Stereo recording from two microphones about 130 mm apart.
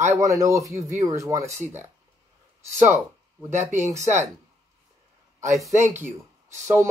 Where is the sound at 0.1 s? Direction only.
25° right (ahead or behind).